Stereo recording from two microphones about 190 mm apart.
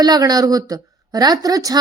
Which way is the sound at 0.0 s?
20° right (ahead or behind).